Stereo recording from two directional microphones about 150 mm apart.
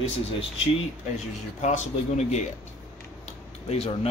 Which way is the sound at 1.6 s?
50° left (ahead or behind).